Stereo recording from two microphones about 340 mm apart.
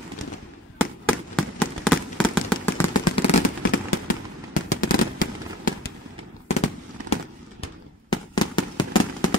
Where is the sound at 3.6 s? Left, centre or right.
Left.